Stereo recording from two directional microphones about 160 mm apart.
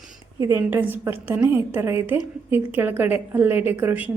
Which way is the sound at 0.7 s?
15° right (ahead or behind).